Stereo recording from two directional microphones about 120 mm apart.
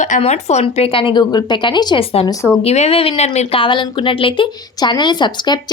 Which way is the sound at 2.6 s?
60° left (ahead or behind).